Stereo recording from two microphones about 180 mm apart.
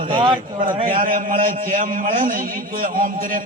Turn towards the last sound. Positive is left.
turn(degrees=-50)  # may be behind; listen again after turning